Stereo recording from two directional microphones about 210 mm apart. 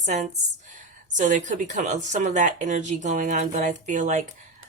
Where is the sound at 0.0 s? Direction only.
35° right (ahead or behind).